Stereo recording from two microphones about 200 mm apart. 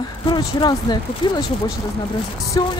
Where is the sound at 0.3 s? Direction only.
20° left (ahead or behind).